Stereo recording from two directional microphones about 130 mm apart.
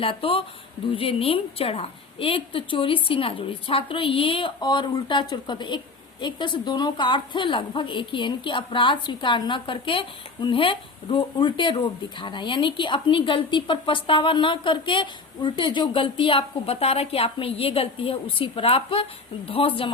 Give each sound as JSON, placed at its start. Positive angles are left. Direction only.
{"t": 0.0, "sound": "a woman's voice", "side_deg": 45}